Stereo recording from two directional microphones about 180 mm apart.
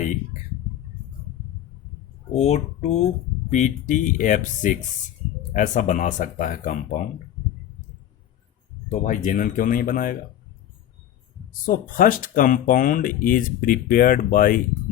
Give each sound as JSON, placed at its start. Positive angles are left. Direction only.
{"t": 2.3, "sound": "speech", "side_deg": 40}
{"t": 8.9, "sound": "speech", "side_deg": 45}
{"t": 11.6, "sound": "speech", "side_deg": 50}